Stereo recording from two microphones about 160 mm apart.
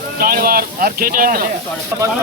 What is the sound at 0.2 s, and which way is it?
Speech, 65° right (ahead or behind).